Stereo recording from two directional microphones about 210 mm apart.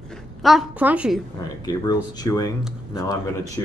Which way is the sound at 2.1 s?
15° left (ahead or behind).